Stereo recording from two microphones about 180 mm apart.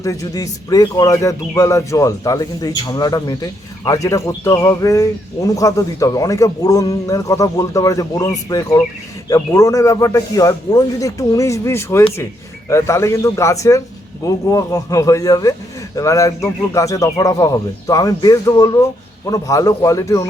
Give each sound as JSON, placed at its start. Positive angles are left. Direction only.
{"t": 0.0, "sound": "a man's voice", "side_deg": 20}